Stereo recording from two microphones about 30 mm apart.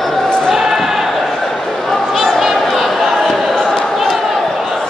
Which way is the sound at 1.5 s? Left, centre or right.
Centre.